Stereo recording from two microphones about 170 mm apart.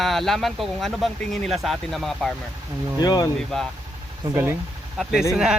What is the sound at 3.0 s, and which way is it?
Speech, 25° left (ahead or behind).